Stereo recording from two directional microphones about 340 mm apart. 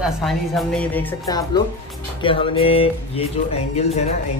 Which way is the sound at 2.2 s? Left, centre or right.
Centre.